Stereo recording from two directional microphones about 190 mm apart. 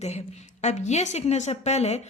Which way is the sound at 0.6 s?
35° left (ahead or behind).